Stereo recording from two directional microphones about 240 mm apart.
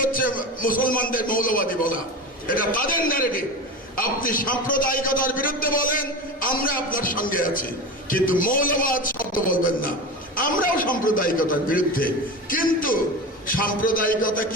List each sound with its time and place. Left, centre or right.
0.0 s a man's voice: left